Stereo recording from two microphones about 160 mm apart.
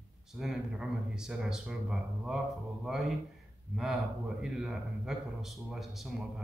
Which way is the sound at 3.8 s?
5° right (ahead or behind).